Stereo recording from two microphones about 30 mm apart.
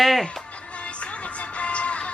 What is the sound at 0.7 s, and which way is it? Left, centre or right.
Music, left.